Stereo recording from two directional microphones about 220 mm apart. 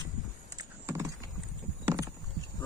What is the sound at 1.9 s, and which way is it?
Rowboat, 15° right (ahead or behind).